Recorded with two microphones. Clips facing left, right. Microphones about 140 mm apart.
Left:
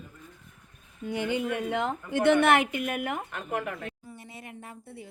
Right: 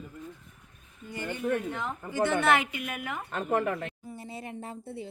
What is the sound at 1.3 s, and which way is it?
Speech, 90° left.